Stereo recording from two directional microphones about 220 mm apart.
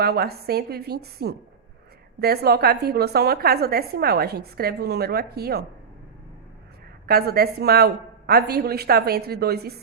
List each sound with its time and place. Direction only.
0.0 s a woman's voice: 45° right (ahead or behind)
7.1 s a woman's voice: 45° right (ahead or behind)